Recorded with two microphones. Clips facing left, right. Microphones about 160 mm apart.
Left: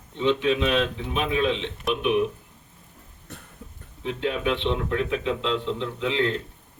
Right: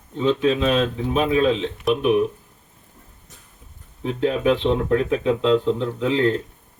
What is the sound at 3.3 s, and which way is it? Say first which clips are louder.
Cough: left 11 dB; 65° left (ahead or behind).